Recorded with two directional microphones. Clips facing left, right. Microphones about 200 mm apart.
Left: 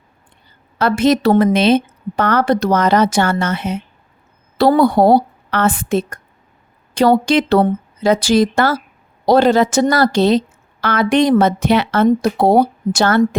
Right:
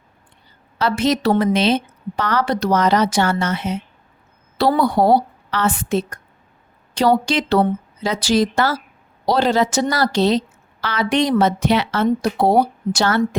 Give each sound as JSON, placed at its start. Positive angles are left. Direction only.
{"t": 0.8, "sound": "a woman's voice", "side_deg": 50}